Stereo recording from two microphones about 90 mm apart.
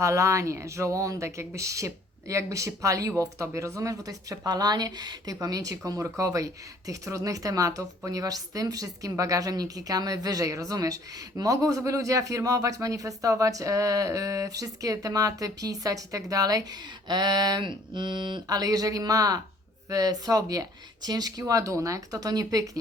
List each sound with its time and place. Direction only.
0.0 s speech: 35° right (ahead or behind)
17.1 s a sound: 50° right (ahead or behind)
19.9 s speech: 45° right (ahead or behind)